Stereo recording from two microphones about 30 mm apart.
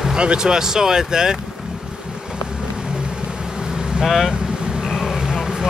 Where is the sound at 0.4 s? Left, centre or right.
Right.